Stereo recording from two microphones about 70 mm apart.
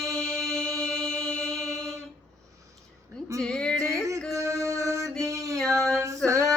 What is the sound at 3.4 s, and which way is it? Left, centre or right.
Female singing, centre.